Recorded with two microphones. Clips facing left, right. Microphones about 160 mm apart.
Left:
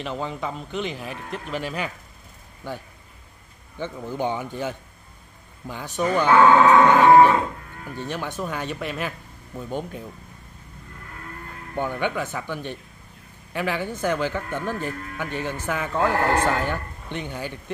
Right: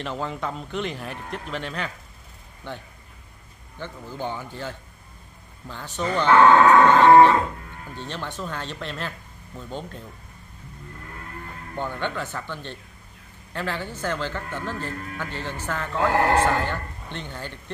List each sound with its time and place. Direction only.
0.0 s a man's voice: centre (ahead or behind)
11.7 s a man's voice: 15° left (ahead or behind)